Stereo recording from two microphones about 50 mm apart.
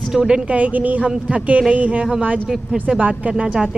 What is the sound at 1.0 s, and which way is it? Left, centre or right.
A woman's voice, centre.